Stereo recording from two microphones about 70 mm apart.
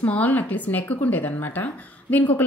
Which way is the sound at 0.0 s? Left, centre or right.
Left.